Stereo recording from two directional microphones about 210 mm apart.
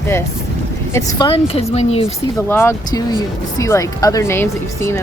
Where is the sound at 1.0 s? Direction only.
20° left (ahead or behind).